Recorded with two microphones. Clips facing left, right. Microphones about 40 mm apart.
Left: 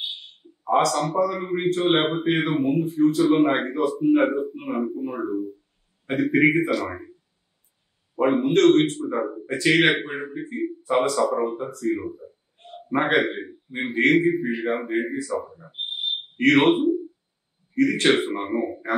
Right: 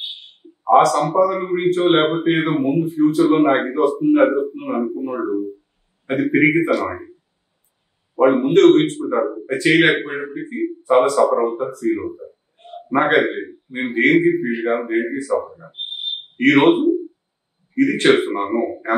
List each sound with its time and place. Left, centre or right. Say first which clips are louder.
0.2 s a man's voice: right 5 dB; centre
8.2 s a man's voice: right 6 dB; centre
12.0 s speech: right 5 dB; right
12.5 s a sound: right 6 dB; centre
12.9 s a man's voice: right 5 dB; centre
15.5 s speech: right 5 dB; centre
15.9 s a sound: even; centre
17.7 s a man's voice: right 5 dB; centre